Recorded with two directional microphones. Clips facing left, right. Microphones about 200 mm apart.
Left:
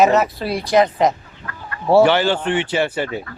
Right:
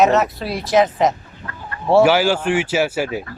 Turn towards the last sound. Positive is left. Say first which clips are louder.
# right 1 dB
turn(degrees=-5)  # may be behind; listen again after turning